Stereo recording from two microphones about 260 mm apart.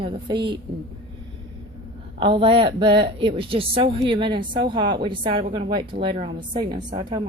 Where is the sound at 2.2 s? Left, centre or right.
Centre.